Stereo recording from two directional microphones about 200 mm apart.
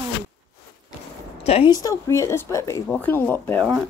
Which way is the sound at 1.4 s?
30° left (ahead or behind).